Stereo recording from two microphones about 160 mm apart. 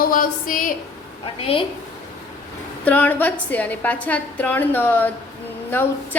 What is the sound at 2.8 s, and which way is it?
A woman's voice, 10° left (ahead or behind).